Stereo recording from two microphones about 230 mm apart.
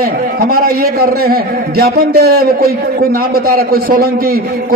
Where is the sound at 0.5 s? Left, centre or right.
Right.